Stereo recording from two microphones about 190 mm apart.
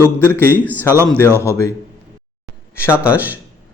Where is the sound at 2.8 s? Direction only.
15° left (ahead or behind).